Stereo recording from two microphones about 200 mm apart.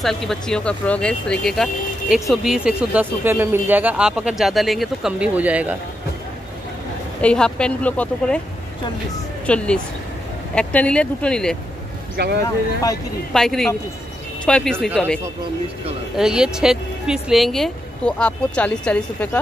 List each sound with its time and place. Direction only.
0.0 s speech: centre (ahead or behind)
7.2 s speech: 5° left (ahead or behind)
9.5 s speech: 5° left (ahead or behind)
12.2 s speech: 55° right (ahead or behind)
13.3 s speech: centre (ahead or behind)
16.2 s speech: 5° right (ahead or behind)